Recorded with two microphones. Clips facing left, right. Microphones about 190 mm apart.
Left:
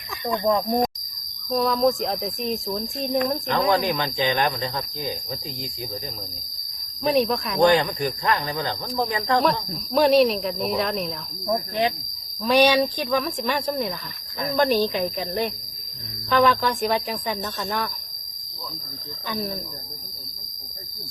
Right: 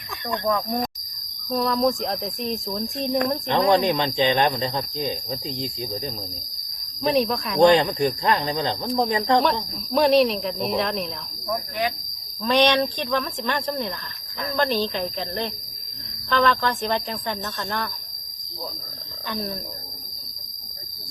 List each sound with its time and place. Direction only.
0.4 s speech: 25° left (ahead or behind)
1.5 s speech: centre (ahead or behind)
3.7 s speech: 25° right (ahead or behind)
7.0 s speech: centre (ahead or behind)
7.6 s speech: 25° right (ahead or behind)
9.4 s speech: centre (ahead or behind)
11.4 s speech: 30° left (ahead or behind)
12.4 s speech: 10° left (ahead or behind)
19.3 s speech: centre (ahead or behind)